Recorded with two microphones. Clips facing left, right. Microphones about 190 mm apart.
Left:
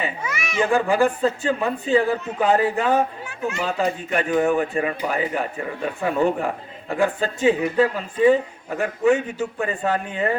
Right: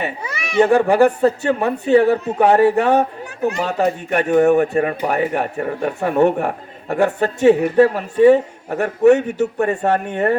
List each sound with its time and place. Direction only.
0.2 s baby cry: 35° right (ahead or behind)
0.6 s speech: 65° right (ahead or behind)
3.4 s speech: 40° right (ahead or behind)
3.7 s speech: 65° right (ahead or behind)
4.7 s speech: 50° right (ahead or behind); by 10.3 s 65° right (ahead or behind)